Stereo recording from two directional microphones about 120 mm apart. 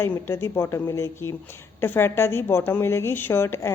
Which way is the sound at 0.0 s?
20° left (ahead or behind).